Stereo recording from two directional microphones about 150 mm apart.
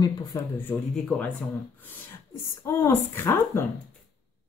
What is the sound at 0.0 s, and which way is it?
Speech, 25° left (ahead or behind).